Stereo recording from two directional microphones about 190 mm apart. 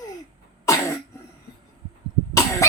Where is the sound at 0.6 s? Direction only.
15° left (ahead or behind).